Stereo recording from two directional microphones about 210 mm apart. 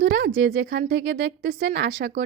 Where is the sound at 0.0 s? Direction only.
55° right (ahead or behind).